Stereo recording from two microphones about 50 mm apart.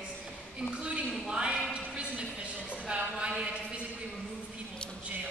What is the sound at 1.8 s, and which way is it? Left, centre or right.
Music, right.